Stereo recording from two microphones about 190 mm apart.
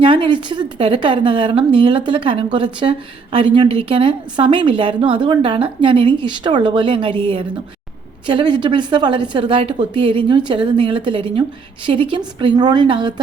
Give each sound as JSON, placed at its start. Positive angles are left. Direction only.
{"t": 0.0, "sound": "a woman's voice", "side_deg": -25}